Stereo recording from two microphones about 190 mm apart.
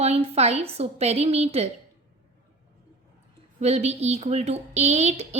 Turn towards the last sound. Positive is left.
turn(degrees=-35)  # may be behind; listen again after turning